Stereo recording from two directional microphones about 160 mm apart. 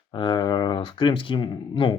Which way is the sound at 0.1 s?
30° left (ahead or behind).